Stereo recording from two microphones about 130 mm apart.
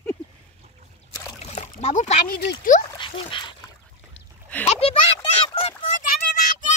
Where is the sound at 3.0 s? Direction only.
40° left (ahead or behind).